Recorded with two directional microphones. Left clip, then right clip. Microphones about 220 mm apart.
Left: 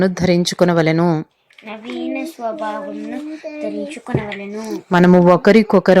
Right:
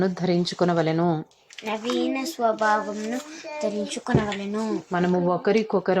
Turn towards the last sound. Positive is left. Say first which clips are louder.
# left 10 dB
turn(degrees=35)  # may be behind; listen again after turning